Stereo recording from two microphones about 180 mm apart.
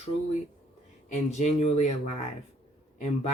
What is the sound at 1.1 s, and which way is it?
Speech, 40° left (ahead or behind).